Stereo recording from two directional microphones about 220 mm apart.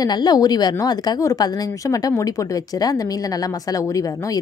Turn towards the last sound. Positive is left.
turn(degrees=15)  # may be behind; listen again after turning